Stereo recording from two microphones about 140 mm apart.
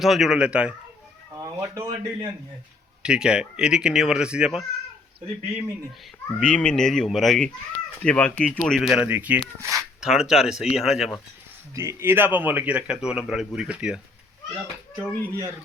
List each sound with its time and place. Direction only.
0.0 s a man's voice: centre (ahead or behind)
1.4 s speech: 25° right (ahead or behind)
3.0 s speech: 5° right (ahead or behind)
6.4 s speech: 5° left (ahead or behind)
9.0 s a man's voice: 10° right (ahead or behind)
9.7 s speech: centre (ahead or behind)
11.7 s a man's voice: 20° right (ahead or behind)
14.9 s speech: 20° right (ahead or behind)